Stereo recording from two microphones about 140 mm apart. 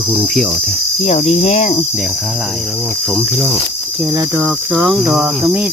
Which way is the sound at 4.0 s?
15° right (ahead or behind).